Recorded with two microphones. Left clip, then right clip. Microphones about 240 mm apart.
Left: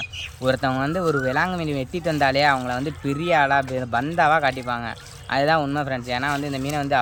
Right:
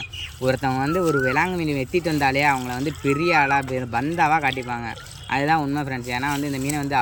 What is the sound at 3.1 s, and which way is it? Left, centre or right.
Speech, left.